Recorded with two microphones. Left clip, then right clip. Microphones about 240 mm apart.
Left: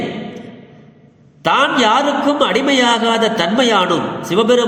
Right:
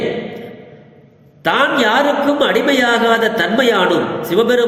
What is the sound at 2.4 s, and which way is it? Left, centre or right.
A man's voice, left.